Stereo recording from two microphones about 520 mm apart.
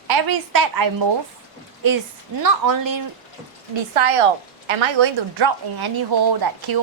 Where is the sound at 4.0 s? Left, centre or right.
Right.